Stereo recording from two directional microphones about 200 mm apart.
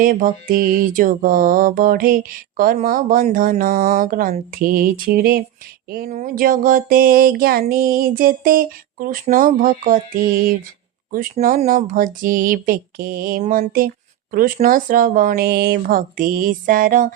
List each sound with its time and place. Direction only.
0.0 s speech: 45° right (ahead or behind)